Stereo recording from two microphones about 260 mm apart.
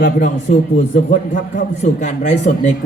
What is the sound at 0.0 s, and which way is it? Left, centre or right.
Speech, left.